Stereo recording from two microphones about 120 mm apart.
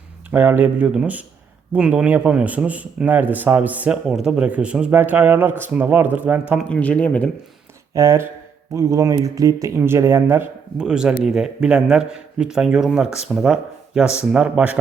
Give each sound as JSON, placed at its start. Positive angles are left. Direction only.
{"t": 0.3, "sound": "a man's voice", "side_deg": -15}
{"t": 6.7, "sound": "speech", "side_deg": 10}
{"t": 7.9, "sound": "speech", "side_deg": -25}
{"t": 10.8, "sound": "a man's voice", "side_deg": -5}